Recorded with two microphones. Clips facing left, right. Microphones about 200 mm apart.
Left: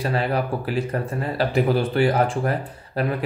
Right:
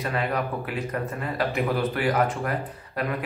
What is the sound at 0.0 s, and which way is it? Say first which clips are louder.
Speech: left 4 dB; 30° left (ahead or behind).